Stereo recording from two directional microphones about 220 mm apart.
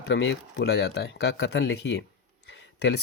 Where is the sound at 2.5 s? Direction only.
55° left (ahead or behind).